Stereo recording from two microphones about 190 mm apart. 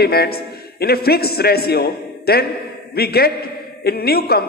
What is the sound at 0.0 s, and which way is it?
A man's voice, 55° left (ahead or behind).